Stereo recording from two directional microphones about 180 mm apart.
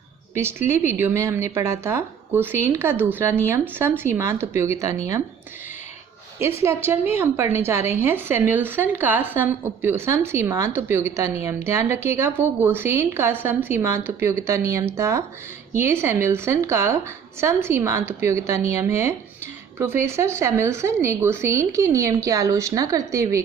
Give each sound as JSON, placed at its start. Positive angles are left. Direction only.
{"t": 0.7, "sound": "a woman's voice", "side_deg": -15}
{"t": 6.6, "sound": "a woman's voice", "side_deg": -15}